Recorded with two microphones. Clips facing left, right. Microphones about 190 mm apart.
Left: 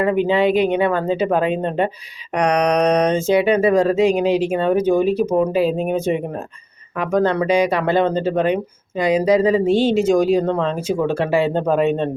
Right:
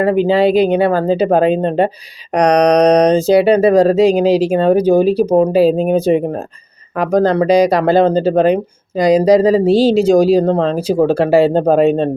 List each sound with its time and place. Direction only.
0.0 s speech: 35° right (ahead or behind)